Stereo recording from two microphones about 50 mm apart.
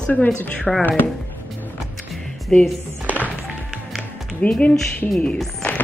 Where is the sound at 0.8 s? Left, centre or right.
Left.